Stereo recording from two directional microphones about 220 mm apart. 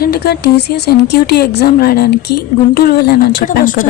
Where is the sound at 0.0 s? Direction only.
45° left (ahead or behind).